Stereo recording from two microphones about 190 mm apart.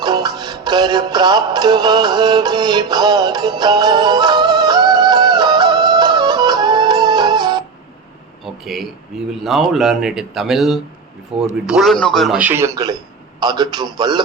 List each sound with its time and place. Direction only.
0.0 s music: 20° right (ahead or behind)
8.6 s a man's voice: centre (ahead or behind); by 14.2 s 20° right (ahead or behind)